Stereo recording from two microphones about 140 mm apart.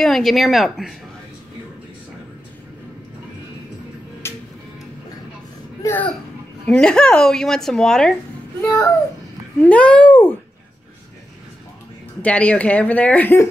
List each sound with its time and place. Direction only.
0.0 s a woman's voice: centre (ahead or behind)
4.2 s music: 20° left (ahead or behind)
5.8 s speech: 15° left (ahead or behind)
6.7 s a woman's voice: 5° left (ahead or behind)
8.6 s speech: 20° left (ahead or behind)
9.6 s speech: 10° left (ahead or behind)
12.2 s speech: 10° left (ahead or behind)